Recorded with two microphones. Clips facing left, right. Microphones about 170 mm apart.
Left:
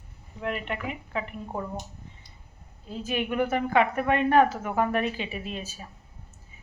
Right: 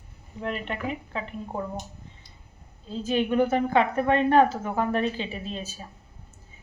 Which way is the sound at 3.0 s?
30° right (ahead or behind).